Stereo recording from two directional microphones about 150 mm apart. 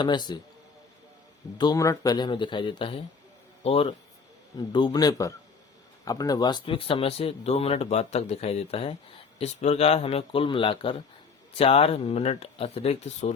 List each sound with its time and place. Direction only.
0.0 s a man's voice: 30° left (ahead or behind)
1.5 s a man's voice: 25° left (ahead or behind); by 13.3 s 45° left (ahead or behind)